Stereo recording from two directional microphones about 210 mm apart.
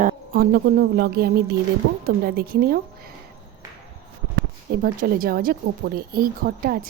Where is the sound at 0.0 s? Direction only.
40° right (ahead or behind).